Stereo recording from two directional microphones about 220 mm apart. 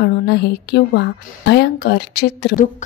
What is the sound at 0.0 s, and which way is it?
A woman's voice, 45° left (ahead or behind).